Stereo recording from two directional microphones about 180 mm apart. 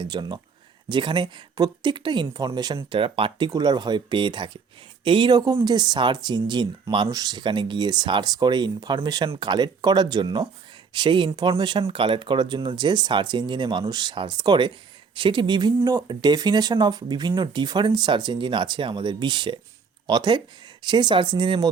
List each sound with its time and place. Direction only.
0.0 s speech: 25° right (ahead or behind)